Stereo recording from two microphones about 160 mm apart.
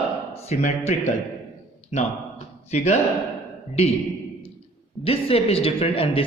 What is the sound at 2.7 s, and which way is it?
Speech, 45° left (ahead or behind).